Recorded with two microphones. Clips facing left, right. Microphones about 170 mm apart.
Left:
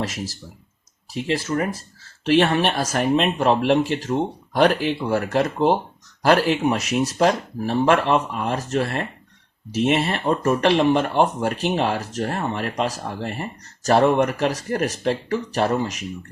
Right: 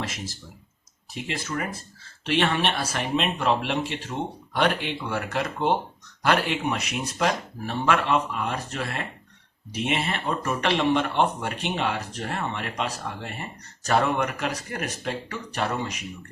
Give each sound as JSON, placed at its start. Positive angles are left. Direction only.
{"t": 1.3, "sound": "speech", "side_deg": 35}